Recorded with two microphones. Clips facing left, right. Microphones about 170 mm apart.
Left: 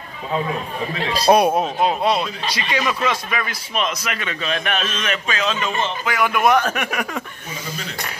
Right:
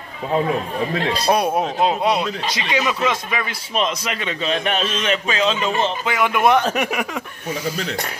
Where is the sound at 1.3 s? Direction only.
35° left (ahead or behind).